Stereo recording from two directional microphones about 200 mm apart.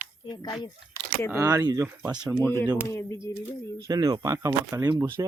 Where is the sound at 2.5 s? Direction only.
15° left (ahead or behind).